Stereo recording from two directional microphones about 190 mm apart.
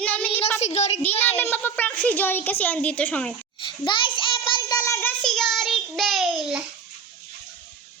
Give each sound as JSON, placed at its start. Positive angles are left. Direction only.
{"t": 0.0, "sound": "a sound", "side_deg": 5}
{"t": 0.6, "sound": "a child's voice", "side_deg": 35}
{"t": 1.4, "sound": "a woman's voice", "side_deg": 10}
{"t": 3.6, "sound": "child singing", "side_deg": 25}